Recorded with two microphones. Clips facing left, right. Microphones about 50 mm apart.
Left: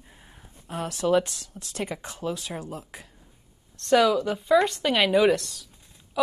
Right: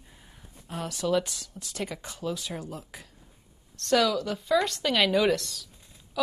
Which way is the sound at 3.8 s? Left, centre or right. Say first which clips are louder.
Left 4 dB; left.